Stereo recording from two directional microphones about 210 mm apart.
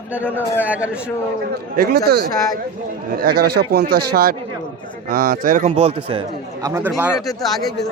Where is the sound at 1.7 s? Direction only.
45° right (ahead or behind).